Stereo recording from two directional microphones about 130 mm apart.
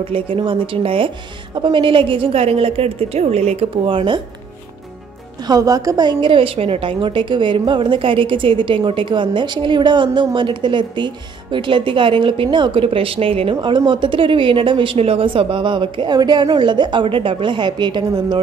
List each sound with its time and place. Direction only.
0.0 s a woman's voice: 40° right (ahead or behind)
5.5 s a woman's voice: 25° right (ahead or behind)